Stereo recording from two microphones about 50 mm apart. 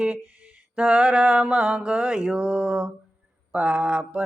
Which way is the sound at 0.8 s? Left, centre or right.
Right.